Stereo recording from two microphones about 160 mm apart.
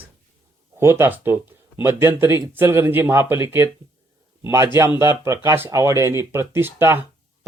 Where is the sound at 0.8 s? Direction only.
15° right (ahead or behind).